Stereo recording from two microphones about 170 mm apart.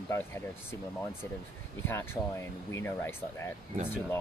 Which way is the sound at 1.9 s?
15° left (ahead or behind).